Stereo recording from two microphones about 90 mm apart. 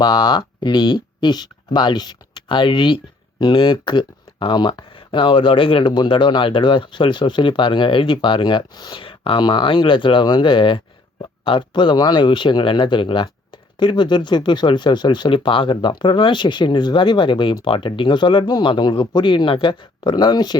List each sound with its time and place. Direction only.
0.0 s speech: 60° left (ahead or behind)
8.7 s speech: 50° left (ahead or behind)
9.0 s speech: 80° left
11.4 s speech: 70° left (ahead or behind); by 20.6 s 50° left (ahead or behind)